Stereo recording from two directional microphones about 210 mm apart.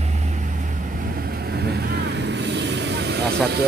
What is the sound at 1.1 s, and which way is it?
Vehicle, 50° right (ahead or behind).